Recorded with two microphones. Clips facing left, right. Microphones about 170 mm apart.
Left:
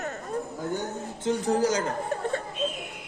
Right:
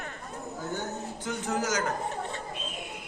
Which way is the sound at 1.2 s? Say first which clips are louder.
Left 8 dB; 30° left (ahead or behind).